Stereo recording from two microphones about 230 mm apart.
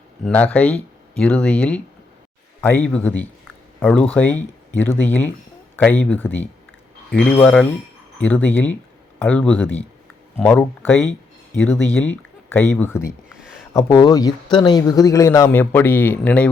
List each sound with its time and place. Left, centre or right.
0.3 s speech: centre
13.3 s a sound: centre
13.7 s speech: centre